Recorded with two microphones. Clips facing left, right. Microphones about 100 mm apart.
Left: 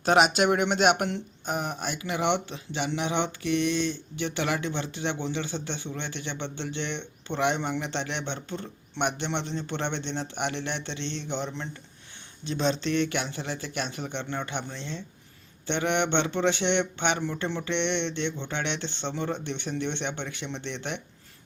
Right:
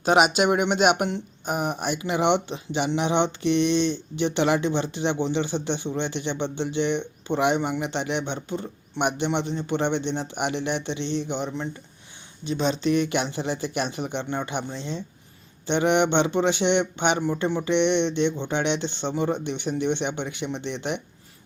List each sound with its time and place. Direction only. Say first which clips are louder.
0.0 s speech: right 2 dB; 5° right (ahead or behind)